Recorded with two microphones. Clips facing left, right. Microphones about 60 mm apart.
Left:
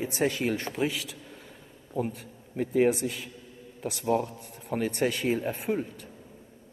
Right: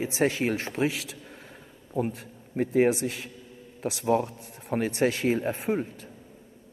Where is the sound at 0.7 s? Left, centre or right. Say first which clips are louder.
Right 2 dB; right.